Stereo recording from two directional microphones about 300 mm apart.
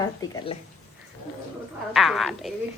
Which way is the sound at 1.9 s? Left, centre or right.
Centre.